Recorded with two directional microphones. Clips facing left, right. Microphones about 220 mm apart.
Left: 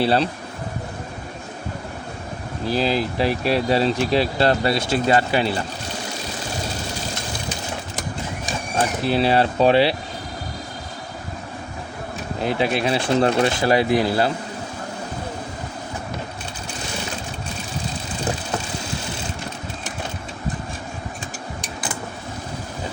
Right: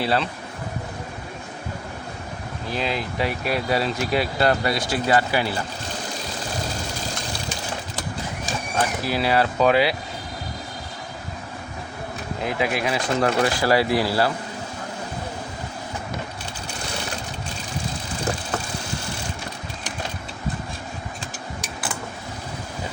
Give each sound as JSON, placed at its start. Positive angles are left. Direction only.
{"t": 0.0, "sound": "speech", "side_deg": 30}
{"t": 2.6, "sound": "speech", "side_deg": 35}
{"t": 9.0, "sound": "speech", "side_deg": 25}
{"t": 12.5, "sound": "speech", "side_deg": 30}